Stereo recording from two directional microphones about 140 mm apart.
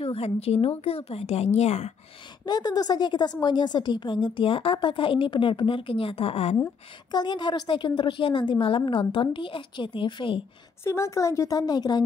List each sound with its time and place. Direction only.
0.0 s a woman's voice: 45° left (ahead or behind)
2.4 s a woman's voice: 30° left (ahead or behind); by 6.5 s 45° left (ahead or behind)
7.1 s a woman's voice: 30° left (ahead or behind)
10.8 s speech: 20° left (ahead or behind)